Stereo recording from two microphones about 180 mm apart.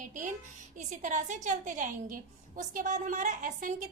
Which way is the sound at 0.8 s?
45° right (ahead or behind).